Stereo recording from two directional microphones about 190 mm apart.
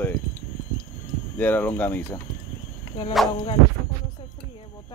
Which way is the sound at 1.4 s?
10° left (ahead or behind).